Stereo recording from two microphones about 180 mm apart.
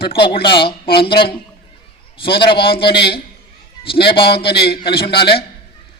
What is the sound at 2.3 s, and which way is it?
Speech, 65° left (ahead or behind).